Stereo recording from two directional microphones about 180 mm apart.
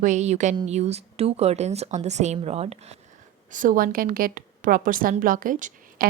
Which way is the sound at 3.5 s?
45° right (ahead or behind).